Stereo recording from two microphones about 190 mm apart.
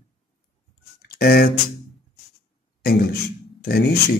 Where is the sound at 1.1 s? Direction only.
55° left (ahead or behind).